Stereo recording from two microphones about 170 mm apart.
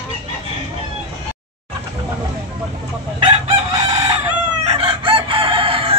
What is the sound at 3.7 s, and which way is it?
Chicken, 20° right (ahead or behind).